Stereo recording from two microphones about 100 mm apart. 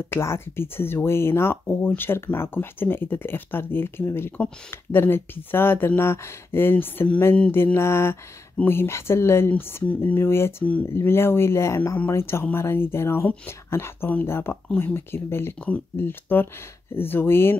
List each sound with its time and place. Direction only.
0.1 s speech: 25° left (ahead or behind)